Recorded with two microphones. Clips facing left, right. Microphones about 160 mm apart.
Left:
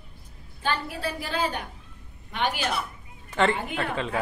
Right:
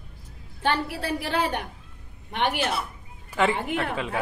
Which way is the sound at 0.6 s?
70° right (ahead or behind).